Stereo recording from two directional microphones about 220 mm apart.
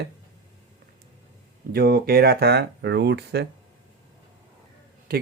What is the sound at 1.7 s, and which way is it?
Speech, 45° right (ahead or behind).